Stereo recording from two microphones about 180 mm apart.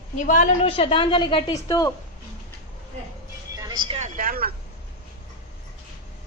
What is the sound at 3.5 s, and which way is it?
Vehicle, 25° right (ahead or behind).